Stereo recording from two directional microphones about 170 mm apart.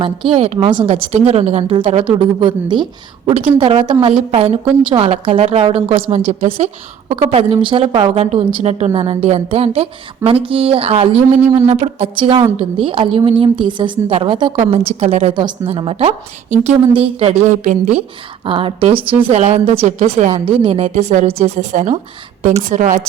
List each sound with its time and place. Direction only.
0.3 s a woman's voice: 40° right (ahead or behind)
14.5 s a woman's voice: 40° right (ahead or behind)
18.4 s a woman's voice: 30° right (ahead or behind); by 23.0 s 45° right (ahead or behind)